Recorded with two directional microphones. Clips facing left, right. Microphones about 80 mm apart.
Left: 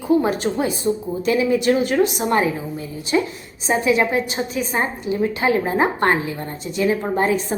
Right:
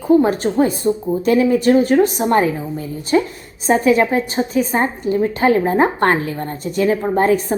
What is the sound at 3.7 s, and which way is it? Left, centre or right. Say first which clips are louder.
A woman's voice: right 4 dB; right.